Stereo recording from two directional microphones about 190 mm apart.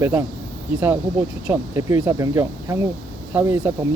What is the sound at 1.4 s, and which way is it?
Speech, 10° right (ahead or behind).